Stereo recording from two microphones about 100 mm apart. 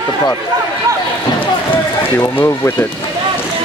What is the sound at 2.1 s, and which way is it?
Speech, 25° left (ahead or behind).